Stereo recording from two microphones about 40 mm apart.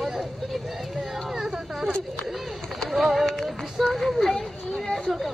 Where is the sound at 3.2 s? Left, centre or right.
Centre.